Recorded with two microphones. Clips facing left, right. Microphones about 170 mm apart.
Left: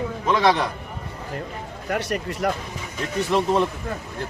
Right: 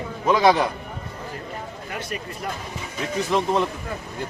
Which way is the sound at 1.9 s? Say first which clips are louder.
Left 8 dB; 75° left (ahead or behind).